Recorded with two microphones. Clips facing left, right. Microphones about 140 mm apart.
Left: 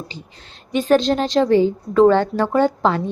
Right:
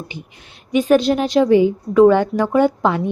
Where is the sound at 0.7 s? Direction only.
10° right (ahead or behind).